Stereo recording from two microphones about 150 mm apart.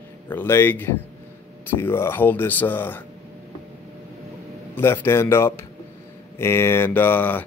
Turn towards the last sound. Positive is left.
turn(degrees=15)  # may be behind; listen again after turning